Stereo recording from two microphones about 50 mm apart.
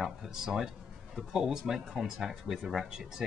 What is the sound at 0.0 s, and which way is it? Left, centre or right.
Speech, centre.